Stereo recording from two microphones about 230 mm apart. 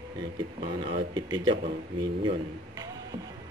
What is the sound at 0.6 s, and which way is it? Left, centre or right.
Speech, right.